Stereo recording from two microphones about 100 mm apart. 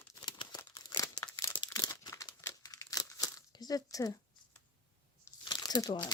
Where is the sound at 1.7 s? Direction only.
35° left (ahead or behind).